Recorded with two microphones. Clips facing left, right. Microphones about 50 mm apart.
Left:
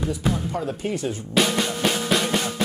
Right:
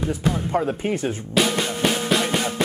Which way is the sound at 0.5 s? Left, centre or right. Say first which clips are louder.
Right 4 dB; right.